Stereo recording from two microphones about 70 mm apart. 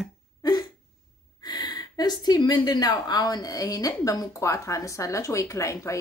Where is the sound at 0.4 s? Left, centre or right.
Left.